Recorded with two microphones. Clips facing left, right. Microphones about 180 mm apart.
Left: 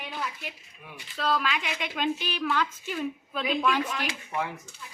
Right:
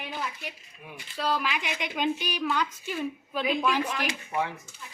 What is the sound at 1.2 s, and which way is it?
A woman's voice, 5° right (ahead or behind).